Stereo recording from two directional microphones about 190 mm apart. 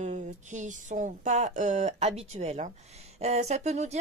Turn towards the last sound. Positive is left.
turn(degrees=-35)  # may be behind; listen again after turning